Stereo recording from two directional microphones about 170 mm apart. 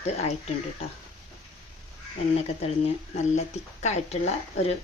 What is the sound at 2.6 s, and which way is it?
Speech, 40° left (ahead or behind).